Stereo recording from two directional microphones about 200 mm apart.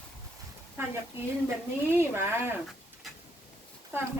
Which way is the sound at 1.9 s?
10° right (ahead or behind).